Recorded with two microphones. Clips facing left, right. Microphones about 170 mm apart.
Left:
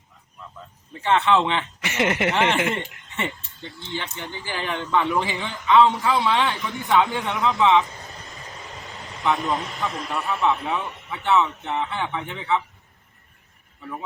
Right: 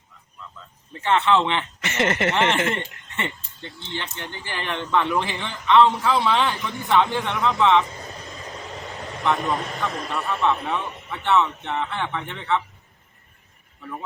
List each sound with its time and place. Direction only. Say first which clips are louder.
1.0 s speech: even; centre (ahead or behind)
1.8 s speech: even; 10° left (ahead or behind)
7.3 s speech: even; 20° left (ahead or behind)
9.2 s speech: even; centre (ahead or behind)
11.3 s speech: even; 15° left (ahead or behind)